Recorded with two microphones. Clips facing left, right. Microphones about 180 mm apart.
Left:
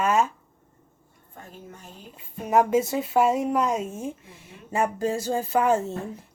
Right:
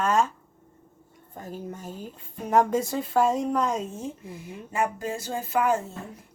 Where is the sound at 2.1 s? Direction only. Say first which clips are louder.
Left 1 dB; 5° left (ahead or behind).